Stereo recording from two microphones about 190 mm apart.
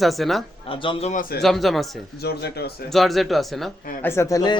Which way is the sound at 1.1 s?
45° left (ahead or behind).